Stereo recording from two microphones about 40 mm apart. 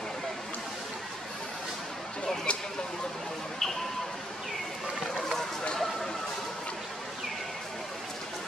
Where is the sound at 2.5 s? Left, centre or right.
Left.